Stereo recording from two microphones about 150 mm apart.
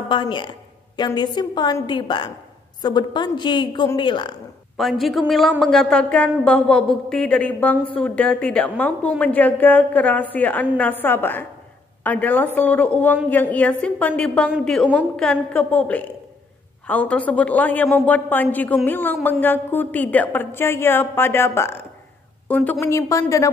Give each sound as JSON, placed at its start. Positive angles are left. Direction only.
{"t": 0.1, "sound": "a woman's voice", "side_deg": 30}
{"t": 4.7, "sound": "a woman's voice", "side_deg": 0}
{"t": 22.8, "sound": "a woman's voice", "side_deg": 20}